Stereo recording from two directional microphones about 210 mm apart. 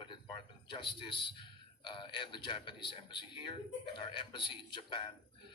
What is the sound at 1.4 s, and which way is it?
A man's voice, 25° left (ahead or behind).